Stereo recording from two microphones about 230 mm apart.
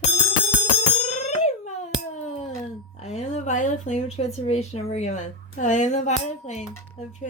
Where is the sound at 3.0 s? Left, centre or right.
Left.